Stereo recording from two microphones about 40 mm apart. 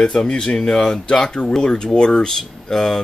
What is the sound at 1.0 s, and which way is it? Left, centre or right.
Speech, left.